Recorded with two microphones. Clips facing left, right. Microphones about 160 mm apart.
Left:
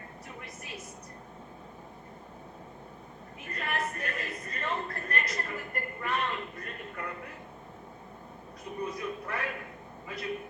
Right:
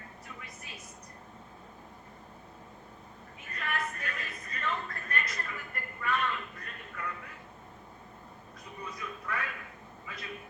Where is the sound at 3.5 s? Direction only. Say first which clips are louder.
Left 2 dB; 40° left (ahead or behind).